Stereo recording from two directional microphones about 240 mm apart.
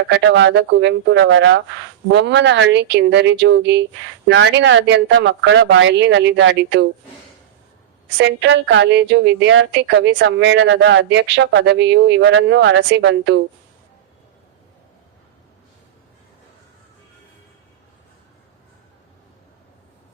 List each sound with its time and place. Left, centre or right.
0.1 s a woman's voice: right
8.2 s a woman's voice: right